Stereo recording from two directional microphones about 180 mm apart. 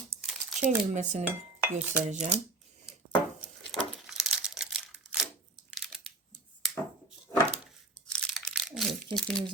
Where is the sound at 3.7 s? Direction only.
Centre (ahead or behind).